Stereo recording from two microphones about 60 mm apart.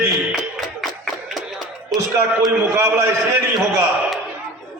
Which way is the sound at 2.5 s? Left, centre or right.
Right.